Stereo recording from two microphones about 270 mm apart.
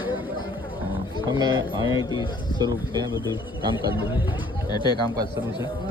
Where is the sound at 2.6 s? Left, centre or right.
Centre.